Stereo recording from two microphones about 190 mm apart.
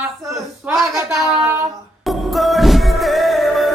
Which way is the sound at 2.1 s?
Centre (ahead or behind).